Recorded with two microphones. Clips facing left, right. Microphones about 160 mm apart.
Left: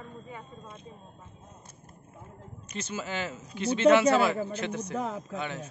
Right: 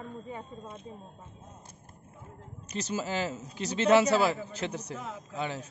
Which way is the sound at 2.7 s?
35° right (ahead or behind).